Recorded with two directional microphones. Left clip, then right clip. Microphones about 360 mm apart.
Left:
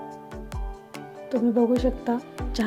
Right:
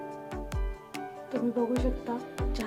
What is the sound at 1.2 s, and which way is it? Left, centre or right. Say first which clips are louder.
Speech: left 8 dB; centre.